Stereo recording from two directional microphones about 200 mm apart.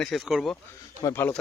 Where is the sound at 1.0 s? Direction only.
15° left (ahead or behind).